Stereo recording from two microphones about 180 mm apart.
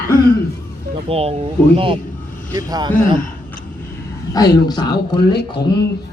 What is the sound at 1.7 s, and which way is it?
Vehicle, 30° right (ahead or behind).